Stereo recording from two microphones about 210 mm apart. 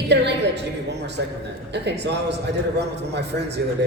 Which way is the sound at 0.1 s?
55° right (ahead or behind).